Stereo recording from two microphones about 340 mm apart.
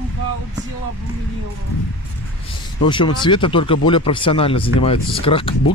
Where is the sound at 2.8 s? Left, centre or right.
Centre.